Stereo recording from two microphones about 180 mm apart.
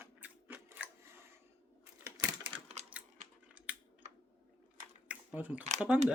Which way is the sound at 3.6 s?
5° right (ahead or behind).